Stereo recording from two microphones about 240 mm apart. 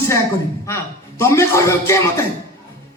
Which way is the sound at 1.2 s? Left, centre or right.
Centre.